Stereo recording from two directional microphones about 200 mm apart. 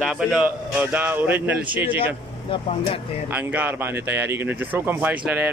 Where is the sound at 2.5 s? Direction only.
30° left (ahead or behind).